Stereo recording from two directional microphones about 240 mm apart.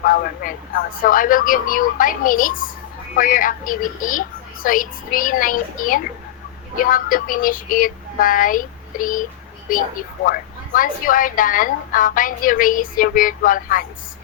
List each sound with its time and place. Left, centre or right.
0.0 s a woman's voice: left